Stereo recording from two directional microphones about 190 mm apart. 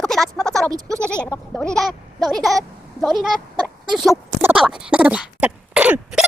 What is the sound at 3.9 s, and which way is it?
Speech, centre (ahead or behind).